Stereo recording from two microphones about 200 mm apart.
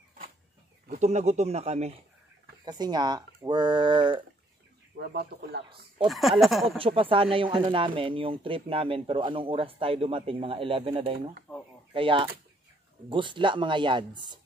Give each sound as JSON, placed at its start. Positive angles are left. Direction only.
{"t": 0.9, "sound": "speech", "side_deg": -35}
{"t": 2.6, "sound": "speech", "side_deg": -20}
{"t": 4.9, "sound": "speech", "side_deg": -55}
{"t": 6.0, "sound": "speech", "side_deg": 0}
{"t": 6.8, "sound": "speech", "side_deg": -25}
{"t": 11.5, "sound": "speech", "side_deg": 5}
{"t": 11.9, "sound": "speech", "side_deg": -25}